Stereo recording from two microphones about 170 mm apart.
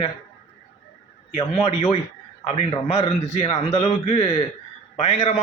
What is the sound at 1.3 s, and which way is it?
A man's voice, 35° left (ahead or behind).